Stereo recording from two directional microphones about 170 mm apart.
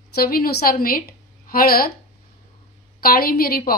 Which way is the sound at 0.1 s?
65° left (ahead or behind).